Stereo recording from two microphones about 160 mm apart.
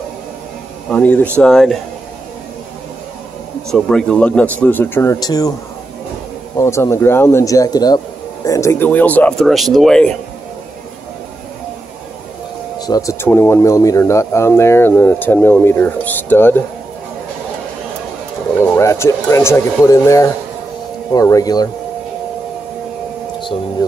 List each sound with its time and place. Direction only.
0.8 s speech: 10° left (ahead or behind)
3.7 s speech: 5° left (ahead or behind); by 5.5 s 25° left (ahead or behind)
6.5 s speech: 15° left (ahead or behind)
12.7 s speech: 25° left (ahead or behind)
18.6 s speech: 15° left (ahead or behind)